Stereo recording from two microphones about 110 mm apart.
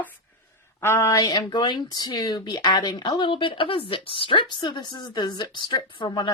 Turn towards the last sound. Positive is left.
turn(degrees=45)  # may be behind; listen again after turning